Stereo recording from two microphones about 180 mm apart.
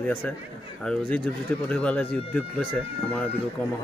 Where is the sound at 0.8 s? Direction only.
5° left (ahead or behind).